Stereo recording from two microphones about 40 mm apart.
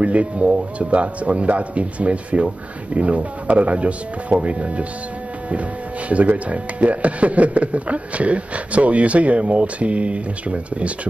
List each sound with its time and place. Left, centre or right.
0.0 s speech: right
6.0 s speech: right